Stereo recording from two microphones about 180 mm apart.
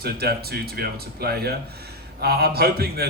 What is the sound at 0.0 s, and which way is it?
Speech, 60° right (ahead or behind).